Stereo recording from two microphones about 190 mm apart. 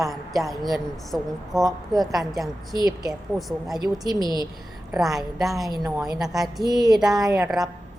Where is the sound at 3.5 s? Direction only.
Centre (ahead or behind).